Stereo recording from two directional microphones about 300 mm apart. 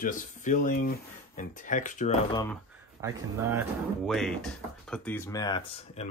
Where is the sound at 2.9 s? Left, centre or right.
Centre.